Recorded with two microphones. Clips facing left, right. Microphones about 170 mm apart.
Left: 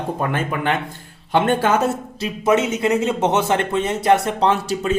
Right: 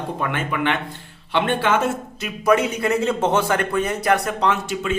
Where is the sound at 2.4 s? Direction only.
20° left (ahead or behind).